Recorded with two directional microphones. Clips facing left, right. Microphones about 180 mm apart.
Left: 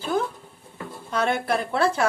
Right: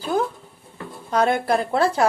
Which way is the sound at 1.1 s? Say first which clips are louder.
Right 4 dB; 35° right (ahead or behind).